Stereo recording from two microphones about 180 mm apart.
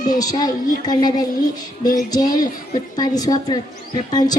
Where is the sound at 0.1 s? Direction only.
20° left (ahead or behind).